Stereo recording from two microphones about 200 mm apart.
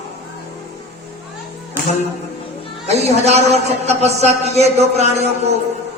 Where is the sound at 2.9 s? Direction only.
35° right (ahead or behind).